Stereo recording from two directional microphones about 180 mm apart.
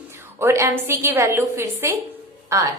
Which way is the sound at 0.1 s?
15° right (ahead or behind).